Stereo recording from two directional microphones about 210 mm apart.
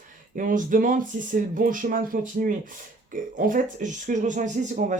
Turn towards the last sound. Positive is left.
turn(degrees=-35)  # may be behind; listen again after turning